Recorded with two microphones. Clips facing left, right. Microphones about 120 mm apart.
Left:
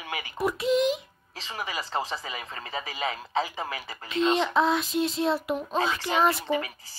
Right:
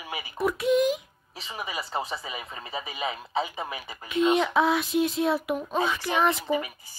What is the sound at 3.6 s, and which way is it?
Speech, 15° right (ahead or behind).